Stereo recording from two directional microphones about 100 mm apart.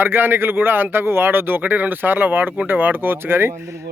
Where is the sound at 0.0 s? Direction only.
20° right (ahead or behind).